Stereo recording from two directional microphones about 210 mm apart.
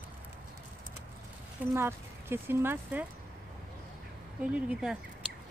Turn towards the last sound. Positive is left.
turn(degrees=-5)  # may be behind; listen again after turning